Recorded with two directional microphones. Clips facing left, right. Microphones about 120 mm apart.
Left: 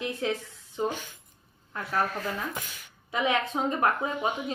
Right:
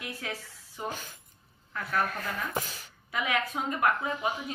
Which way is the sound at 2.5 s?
35° right (ahead or behind).